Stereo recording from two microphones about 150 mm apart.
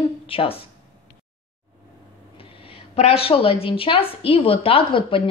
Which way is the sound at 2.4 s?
35° left (ahead or behind).